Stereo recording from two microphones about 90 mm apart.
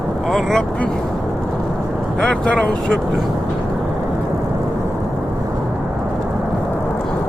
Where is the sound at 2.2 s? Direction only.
15° left (ahead or behind).